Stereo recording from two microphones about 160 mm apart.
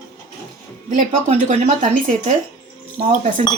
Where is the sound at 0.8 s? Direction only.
50° right (ahead or behind).